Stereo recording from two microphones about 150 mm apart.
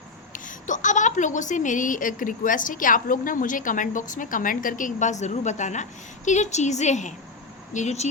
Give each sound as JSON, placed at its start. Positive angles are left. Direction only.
{"t": 0.3, "sound": "a woman's voice", "side_deg": 60}